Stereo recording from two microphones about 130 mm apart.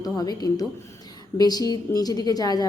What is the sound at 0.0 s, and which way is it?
A woman's voice, 30° left (ahead or behind).